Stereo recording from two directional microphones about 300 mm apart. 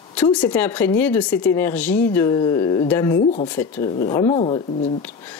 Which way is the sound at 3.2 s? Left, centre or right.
Left.